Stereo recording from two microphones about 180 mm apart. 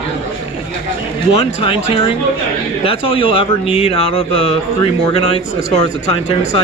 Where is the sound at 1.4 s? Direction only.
30° left (ahead or behind).